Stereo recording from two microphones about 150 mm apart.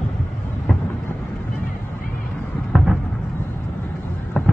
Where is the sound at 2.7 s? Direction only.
Centre (ahead or behind).